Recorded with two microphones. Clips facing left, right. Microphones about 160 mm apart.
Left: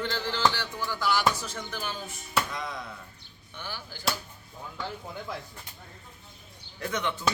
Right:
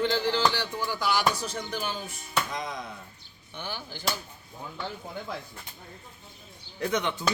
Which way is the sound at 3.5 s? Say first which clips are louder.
Right 3 dB; 20° right (ahead or behind).